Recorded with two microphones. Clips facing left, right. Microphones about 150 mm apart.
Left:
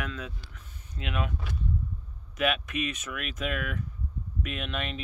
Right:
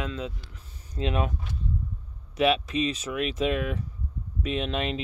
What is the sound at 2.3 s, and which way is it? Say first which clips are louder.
Speech: right 5 dB; 30° right (ahead or behind).